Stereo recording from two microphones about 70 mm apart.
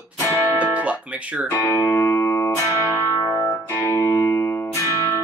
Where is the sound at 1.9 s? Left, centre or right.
Left.